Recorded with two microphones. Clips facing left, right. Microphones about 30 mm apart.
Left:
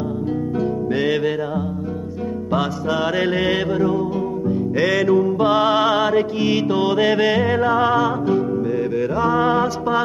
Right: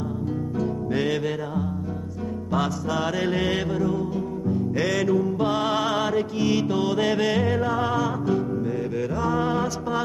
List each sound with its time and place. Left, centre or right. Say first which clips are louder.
0.6 s music: left 4 dB; centre
2.5 s music: left 4 dB; left